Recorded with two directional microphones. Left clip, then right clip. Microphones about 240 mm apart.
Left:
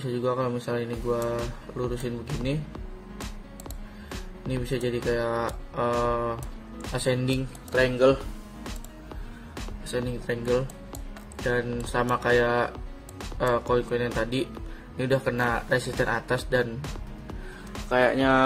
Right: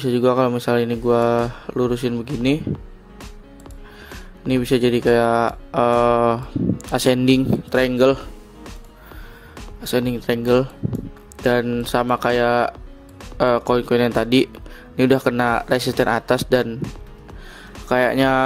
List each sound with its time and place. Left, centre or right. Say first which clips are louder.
0.0 s speech: right 10 dB; right
4.5 s speech: right 11 dB; right
9.9 s speech: right 9 dB; right
17.8 s speech: right 5 dB; right